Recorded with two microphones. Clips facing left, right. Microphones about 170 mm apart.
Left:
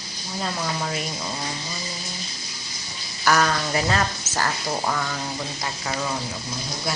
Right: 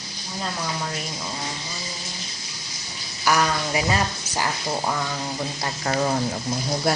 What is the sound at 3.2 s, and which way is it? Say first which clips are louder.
Speech: left 1 dB; 10° right (ahead or behind).